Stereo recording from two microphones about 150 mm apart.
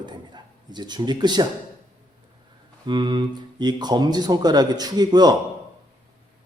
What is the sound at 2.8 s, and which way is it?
Speech, 30° right (ahead or behind).